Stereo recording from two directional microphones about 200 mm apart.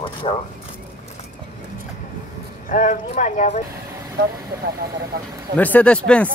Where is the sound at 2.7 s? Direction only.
40° left (ahead or behind).